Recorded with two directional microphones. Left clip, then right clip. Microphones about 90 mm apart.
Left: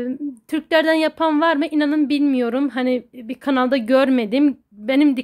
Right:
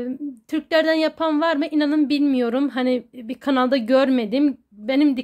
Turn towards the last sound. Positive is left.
turn(degrees=30)  # may be behind; listen again after turning